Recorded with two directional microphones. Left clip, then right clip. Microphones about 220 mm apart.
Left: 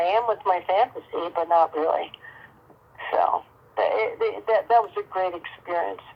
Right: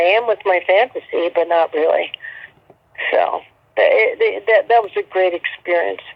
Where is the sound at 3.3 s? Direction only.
25° right (ahead or behind).